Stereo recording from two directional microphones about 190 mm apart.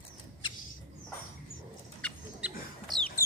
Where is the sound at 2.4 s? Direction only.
5° right (ahead or behind).